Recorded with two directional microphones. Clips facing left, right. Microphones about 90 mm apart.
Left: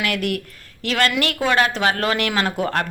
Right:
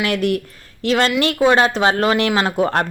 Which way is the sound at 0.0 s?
25° right (ahead or behind).